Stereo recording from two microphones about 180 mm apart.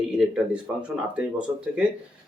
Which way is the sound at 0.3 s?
5° right (ahead or behind).